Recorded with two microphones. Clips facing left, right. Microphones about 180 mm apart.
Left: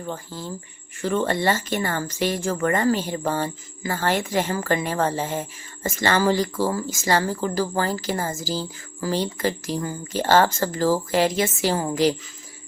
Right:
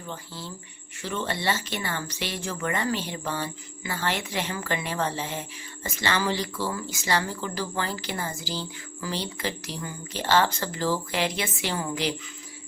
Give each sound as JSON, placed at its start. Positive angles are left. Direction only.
{"t": 0.0, "sound": "speech", "side_deg": 45}